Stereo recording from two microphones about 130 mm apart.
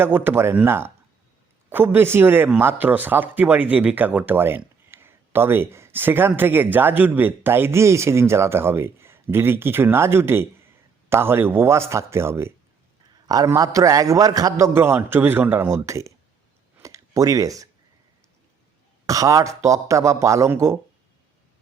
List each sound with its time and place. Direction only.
0.0 s speech: 15° right (ahead or behind)
16.8 s a sound: 25° right (ahead or behind)
19.0 s speech: 25° right (ahead or behind)